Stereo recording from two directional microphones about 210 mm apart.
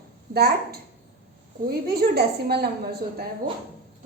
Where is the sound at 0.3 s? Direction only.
50° right (ahead or behind).